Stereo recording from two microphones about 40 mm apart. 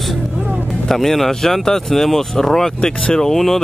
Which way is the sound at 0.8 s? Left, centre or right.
Centre.